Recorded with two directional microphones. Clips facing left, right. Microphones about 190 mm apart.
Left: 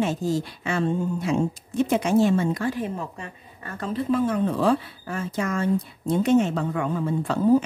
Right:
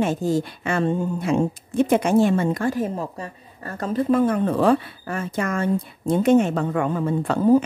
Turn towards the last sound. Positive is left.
turn(degrees=-55)  # may be behind; listen again after turning